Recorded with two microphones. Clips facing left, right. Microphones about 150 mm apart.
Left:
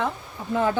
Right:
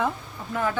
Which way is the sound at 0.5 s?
30° left (ahead or behind).